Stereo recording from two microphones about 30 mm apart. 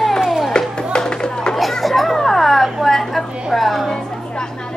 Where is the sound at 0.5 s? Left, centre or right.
Left.